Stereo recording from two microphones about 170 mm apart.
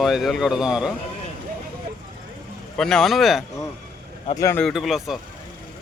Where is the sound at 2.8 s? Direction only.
5° left (ahead or behind).